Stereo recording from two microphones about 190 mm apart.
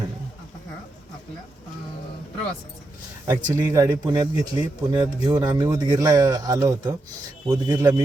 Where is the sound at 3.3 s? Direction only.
15° right (ahead or behind).